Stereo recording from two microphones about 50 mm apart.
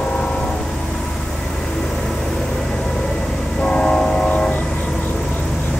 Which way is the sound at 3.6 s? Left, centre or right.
Left.